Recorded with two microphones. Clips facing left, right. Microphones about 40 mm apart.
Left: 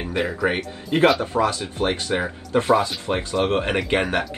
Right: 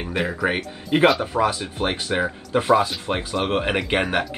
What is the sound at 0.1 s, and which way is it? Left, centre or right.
Speech, centre.